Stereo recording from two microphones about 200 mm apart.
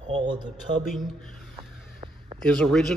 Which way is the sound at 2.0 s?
25° right (ahead or behind).